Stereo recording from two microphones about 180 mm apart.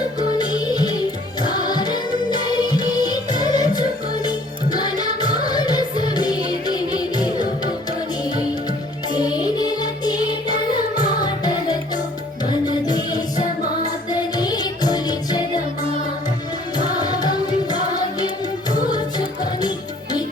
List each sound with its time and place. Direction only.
0.3 s music: 20° left (ahead or behind)
9.1 s music: 20° left (ahead or behind)
16.7 s music: 20° left (ahead or behind)